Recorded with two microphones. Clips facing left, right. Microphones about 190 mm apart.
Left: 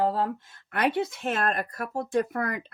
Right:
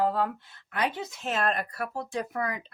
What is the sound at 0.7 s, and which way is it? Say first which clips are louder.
Speech: left 5 dB; 65° left (ahead or behind).